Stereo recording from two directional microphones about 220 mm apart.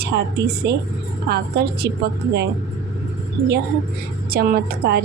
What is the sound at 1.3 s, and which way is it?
Speech, 45° right (ahead or behind).